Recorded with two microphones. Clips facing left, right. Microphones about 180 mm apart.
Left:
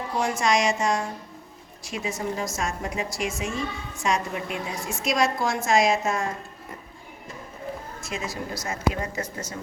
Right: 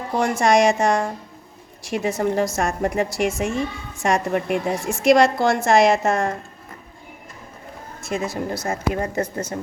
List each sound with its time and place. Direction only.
0.2 s a woman's voice: 55° right (ahead or behind)
8.0 s a woman's voice: 55° right (ahead or behind)